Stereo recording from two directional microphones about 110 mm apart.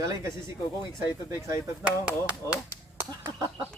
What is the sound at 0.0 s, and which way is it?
Speech, 30° right (ahead or behind).